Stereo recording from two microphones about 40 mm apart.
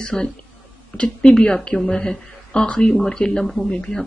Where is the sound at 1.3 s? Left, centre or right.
Centre.